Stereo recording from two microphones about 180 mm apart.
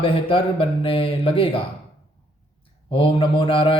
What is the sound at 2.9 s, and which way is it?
Speech, 30° left (ahead or behind).